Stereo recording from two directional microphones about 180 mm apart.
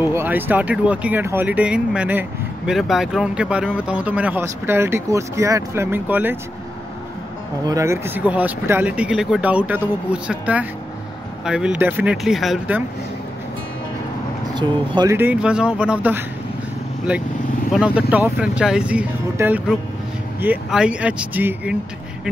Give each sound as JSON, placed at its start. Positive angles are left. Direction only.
{"t": 0.0, "sound": "speech", "side_deg": -10}
{"t": 7.6, "sound": "speech", "side_deg": -15}
{"t": 14.5, "sound": "speech", "side_deg": -25}
{"t": 15.1, "sound": "speech", "side_deg": -10}
{"t": 17.7, "sound": "speech", "side_deg": -5}